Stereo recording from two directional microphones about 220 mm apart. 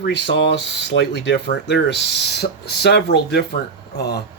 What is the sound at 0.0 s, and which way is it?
Speech, 50° left (ahead or behind).